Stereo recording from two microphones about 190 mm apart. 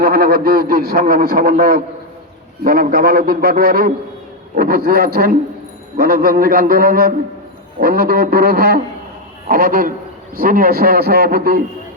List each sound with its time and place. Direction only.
0.0 s a man's voice: 55° right (ahead or behind)